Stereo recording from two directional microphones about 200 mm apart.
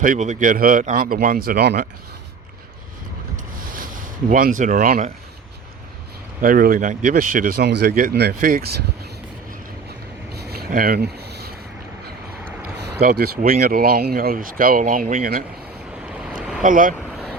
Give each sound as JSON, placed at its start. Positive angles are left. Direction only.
{"t": 0.0, "sound": "speech", "side_deg": -40}
{"t": 3.6, "sound": "a sound", "side_deg": -45}
{"t": 4.3, "sound": "speech", "side_deg": -45}
{"t": 6.4, "sound": "speech", "side_deg": -45}
{"t": 10.3, "sound": "a sound", "side_deg": -55}
{"t": 12.7, "sound": "vehicle", "side_deg": -55}
{"t": 13.4, "sound": "speech", "side_deg": -45}
{"t": 16.0, "sound": "boat", "side_deg": -5}
{"t": 16.6, "sound": "speech", "side_deg": -45}